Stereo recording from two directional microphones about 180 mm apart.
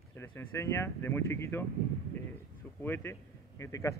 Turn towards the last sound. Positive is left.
turn(degrees=15)  # may be behind; listen again after turning